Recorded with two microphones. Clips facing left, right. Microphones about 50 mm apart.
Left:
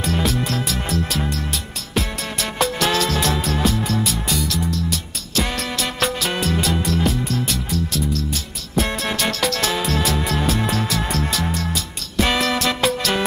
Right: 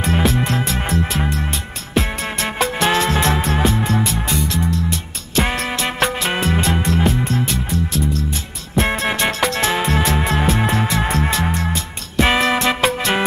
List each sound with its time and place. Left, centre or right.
0.0 s music: right